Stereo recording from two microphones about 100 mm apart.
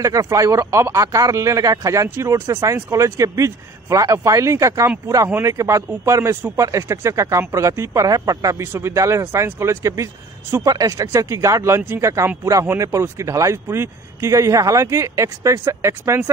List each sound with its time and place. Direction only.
0.0 s speech: 30° right (ahead or behind)